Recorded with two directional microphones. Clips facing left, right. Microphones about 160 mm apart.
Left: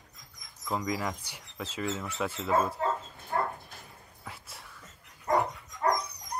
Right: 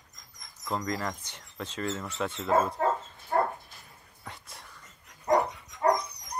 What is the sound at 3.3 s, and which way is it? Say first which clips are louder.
Dog: right 4 dB; 50° right (ahead or behind).